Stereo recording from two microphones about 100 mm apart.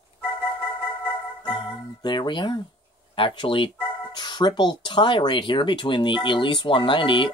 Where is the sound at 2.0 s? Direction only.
50° left (ahead or behind).